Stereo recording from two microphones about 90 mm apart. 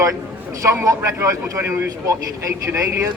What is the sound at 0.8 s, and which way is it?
A man's voice, 35° right (ahead or behind).